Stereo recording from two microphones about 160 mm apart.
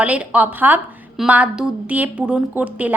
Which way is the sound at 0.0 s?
10° right (ahead or behind).